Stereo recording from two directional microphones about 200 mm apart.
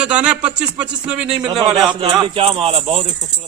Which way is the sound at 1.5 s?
20° right (ahead or behind).